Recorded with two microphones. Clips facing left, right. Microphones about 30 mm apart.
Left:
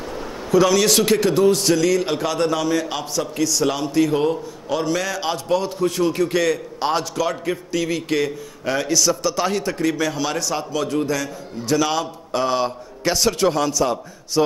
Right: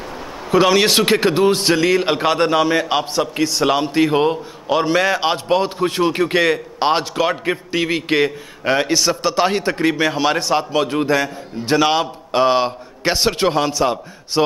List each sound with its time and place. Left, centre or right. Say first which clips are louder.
0.5 s a man's voice: right 2 dB; right